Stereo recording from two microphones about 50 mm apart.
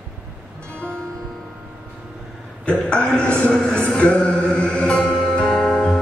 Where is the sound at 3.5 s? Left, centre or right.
Centre.